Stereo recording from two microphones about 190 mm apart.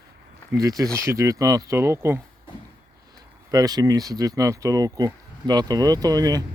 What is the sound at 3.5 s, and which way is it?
Speech, 20° right (ahead or behind).